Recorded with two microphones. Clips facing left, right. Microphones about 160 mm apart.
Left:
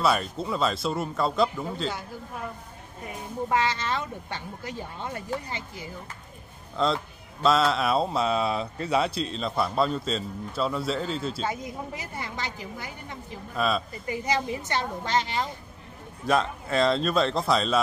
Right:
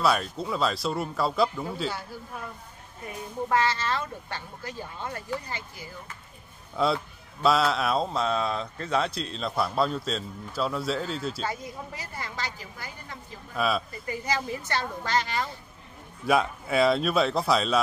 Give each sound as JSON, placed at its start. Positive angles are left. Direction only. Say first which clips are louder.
{"t": 0.0, "sound": "speech", "louder": "even", "side_deg": 0}
{"t": 3.4, "sound": "speech", "louder": "right 1 dB", "side_deg": 20}
{"t": 6.8, "sound": "speech", "louder": "even", "side_deg": -5}
{"t": 11.4, "sound": "speech", "louder": "left 2 dB", "side_deg": 20}
{"t": 13.6, "sound": "speech", "louder": "even", "side_deg": -5}
{"t": 14.0, "sound": "speech", "louder": "left 5 dB", "side_deg": 20}
{"t": 16.3, "sound": "speech", "louder": "even", "side_deg": -5}